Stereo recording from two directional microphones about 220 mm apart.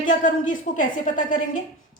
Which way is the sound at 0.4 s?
35° left (ahead or behind).